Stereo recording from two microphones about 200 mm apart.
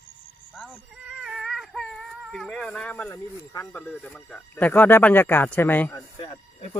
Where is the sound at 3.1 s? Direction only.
10° left (ahead or behind).